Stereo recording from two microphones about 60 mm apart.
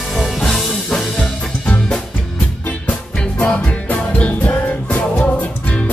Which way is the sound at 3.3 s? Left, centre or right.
Centre.